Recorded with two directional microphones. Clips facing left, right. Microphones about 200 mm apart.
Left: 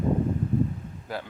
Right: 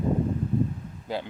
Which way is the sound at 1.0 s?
25° right (ahead or behind).